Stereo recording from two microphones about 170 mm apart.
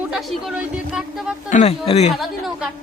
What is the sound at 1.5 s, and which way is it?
Speech, 40° left (ahead or behind).